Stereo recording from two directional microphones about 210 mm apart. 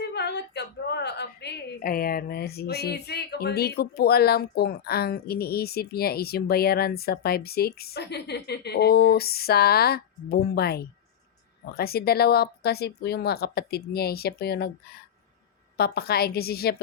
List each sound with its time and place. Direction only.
0.0 s a woman's voice: 55° left (ahead or behind)
15.8 s a woman's voice: 50° left (ahead or behind)